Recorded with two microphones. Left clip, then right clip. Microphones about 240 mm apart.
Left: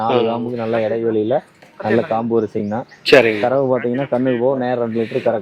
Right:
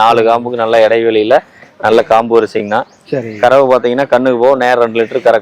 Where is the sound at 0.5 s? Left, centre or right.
Centre.